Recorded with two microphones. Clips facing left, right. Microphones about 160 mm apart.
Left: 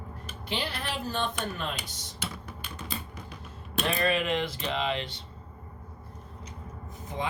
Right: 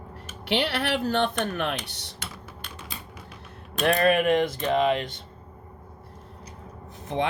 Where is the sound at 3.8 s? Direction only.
55° right (ahead or behind).